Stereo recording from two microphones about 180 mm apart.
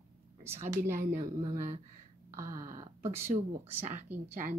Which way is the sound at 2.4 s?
15° right (ahead or behind).